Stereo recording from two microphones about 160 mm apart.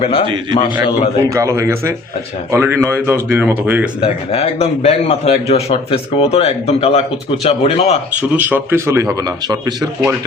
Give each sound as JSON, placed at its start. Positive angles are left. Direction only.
{"t": 0.0, "sound": "a man's voice", "side_deg": 35}
{"t": 1.3, "sound": "speech", "side_deg": -20}
{"t": 4.0, "sound": "a man's voice", "side_deg": 40}
{"t": 8.4, "sound": "speech", "side_deg": -10}